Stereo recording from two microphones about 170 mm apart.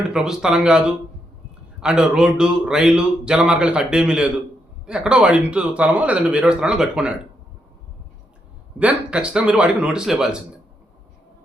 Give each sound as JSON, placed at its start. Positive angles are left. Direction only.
{"t": 0.1, "sound": "speech", "side_deg": -5}
{"t": 8.8, "sound": "speech", "side_deg": -5}